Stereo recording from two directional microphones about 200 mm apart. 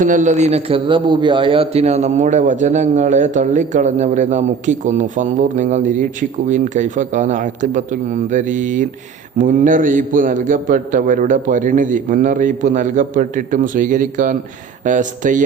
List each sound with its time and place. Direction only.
0.0 s a man's voice: 40° right (ahead or behind)